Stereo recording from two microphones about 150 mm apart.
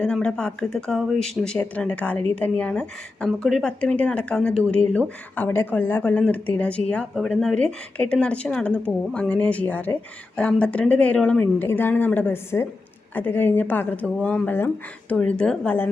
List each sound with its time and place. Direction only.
0.0 s speech: 5° left (ahead or behind)